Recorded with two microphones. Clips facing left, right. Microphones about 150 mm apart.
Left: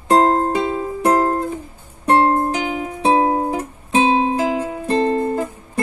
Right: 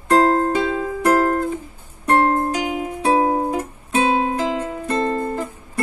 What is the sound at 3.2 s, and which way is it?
Music, 10° left (ahead or behind).